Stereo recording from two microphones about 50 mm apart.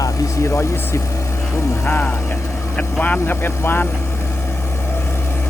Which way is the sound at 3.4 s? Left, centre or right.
Left.